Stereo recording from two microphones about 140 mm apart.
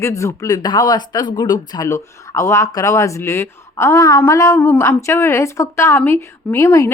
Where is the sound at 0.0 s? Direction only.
20° left (ahead or behind).